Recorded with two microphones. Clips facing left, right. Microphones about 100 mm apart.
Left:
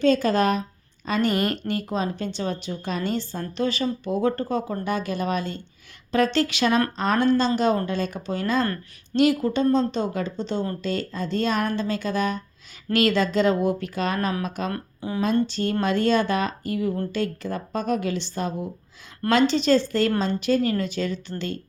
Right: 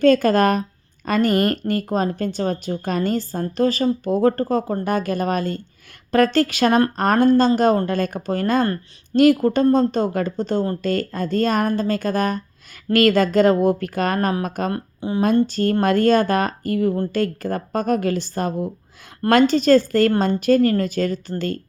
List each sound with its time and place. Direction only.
0.0 s a woman's voice: 50° right (ahead or behind)
14.7 s speech: 25° right (ahead or behind)
15.4 s a woman's voice: 45° right (ahead or behind)